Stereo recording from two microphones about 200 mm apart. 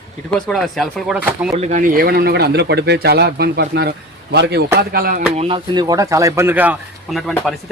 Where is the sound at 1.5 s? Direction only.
35° right (ahead or behind).